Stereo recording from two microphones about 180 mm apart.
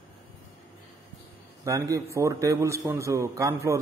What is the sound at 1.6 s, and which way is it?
A man's voice, 20° right (ahead or behind).